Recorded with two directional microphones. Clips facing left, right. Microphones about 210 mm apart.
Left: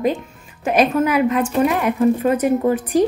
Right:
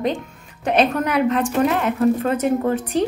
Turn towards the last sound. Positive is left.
turn(degrees=10)  # may be behind; listen again after turning